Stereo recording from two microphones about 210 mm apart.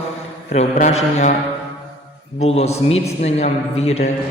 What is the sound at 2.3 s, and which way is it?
A man's voice, 30° left (ahead or behind).